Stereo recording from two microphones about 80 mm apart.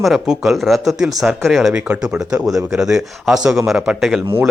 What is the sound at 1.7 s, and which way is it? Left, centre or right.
Speech, centre.